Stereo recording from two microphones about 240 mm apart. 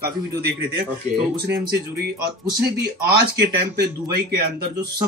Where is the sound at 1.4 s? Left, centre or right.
Right.